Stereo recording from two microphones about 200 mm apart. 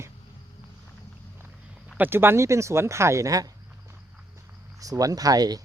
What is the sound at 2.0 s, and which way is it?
Speech, 10° right (ahead or behind).